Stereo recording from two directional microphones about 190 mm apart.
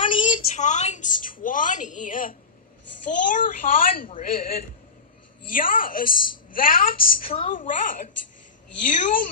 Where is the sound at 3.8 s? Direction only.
45° left (ahead or behind).